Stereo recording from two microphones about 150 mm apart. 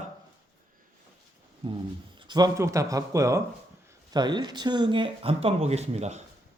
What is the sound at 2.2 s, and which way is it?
Speech, 30° right (ahead or behind).